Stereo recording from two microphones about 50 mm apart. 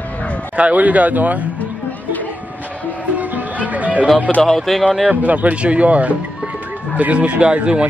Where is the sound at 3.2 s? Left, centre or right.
Right.